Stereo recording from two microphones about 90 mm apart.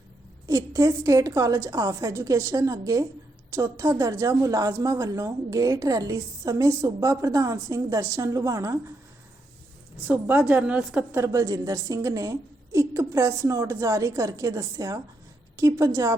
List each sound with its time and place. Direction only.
0.4 s a woman's voice: 40° right (ahead or behind)
10.1 s a woman's voice: 20° right (ahead or behind)
11.1 s a woman's voice: 30° right (ahead or behind)